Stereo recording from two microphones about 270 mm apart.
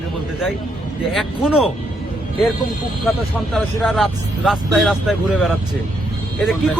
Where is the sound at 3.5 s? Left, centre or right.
Centre.